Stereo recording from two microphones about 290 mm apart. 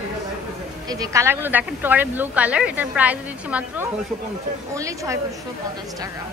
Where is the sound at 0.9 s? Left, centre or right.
Centre.